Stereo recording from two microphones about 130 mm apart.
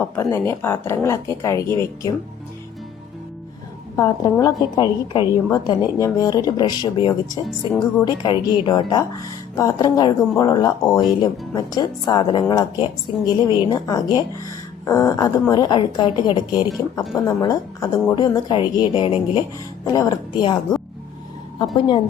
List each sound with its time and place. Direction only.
0.2 s speech: 20° left (ahead or behind)
3.9 s speech: 30° left (ahead or behind)
17.0 s speech: centre (ahead or behind)
17.2 s speech: 25° left (ahead or behind); by 19.5 s 45° left (ahead or behind)
19.8 s speech: 30° left (ahead or behind)
21.8 s speech: 40° left (ahead or behind)